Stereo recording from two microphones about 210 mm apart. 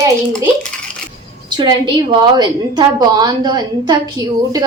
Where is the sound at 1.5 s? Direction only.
20° right (ahead or behind).